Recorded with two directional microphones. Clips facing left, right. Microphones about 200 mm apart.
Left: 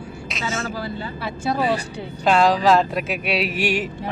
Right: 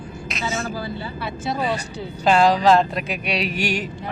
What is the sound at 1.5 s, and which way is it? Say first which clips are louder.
Speech: left 3 dB; 60° left (ahead or behind).